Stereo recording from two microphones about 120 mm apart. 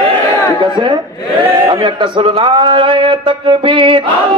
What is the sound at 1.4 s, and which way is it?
A man's voice, 45° right (ahead or behind).